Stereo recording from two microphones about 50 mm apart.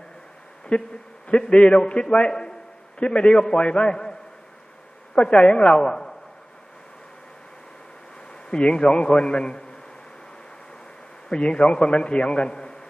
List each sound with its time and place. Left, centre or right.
0.7 s a man's voice: left
5.1 s a man's voice: left
8.3 s a man's voice: centre
11.3 s a man's voice: left